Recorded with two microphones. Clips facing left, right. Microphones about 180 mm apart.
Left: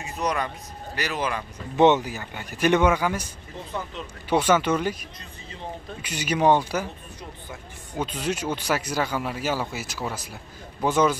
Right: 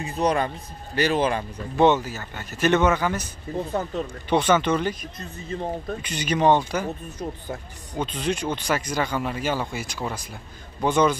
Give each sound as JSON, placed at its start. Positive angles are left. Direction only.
{"t": 0.0, "sound": "a man's voice", "side_deg": -30}
{"t": 1.8, "sound": "speech", "side_deg": 20}
{"t": 3.5, "sound": "a man's voice", "side_deg": -35}
{"t": 4.3, "sound": "speech", "side_deg": 10}
{"t": 5.2, "sound": "speech", "side_deg": -45}
{"t": 6.0, "sound": "speech", "side_deg": 10}
{"t": 7.9, "sound": "speech", "side_deg": 10}